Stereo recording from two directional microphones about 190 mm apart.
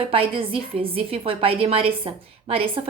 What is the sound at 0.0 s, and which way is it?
A woman's voice, 30° right (ahead or behind).